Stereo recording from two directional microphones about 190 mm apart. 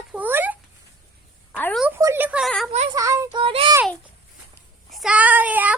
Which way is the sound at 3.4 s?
30° right (ahead or behind).